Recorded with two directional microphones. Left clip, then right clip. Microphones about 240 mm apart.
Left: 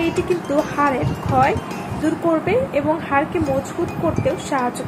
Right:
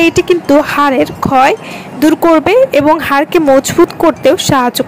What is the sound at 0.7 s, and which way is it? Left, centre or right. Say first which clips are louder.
Speech: right 9 dB; right.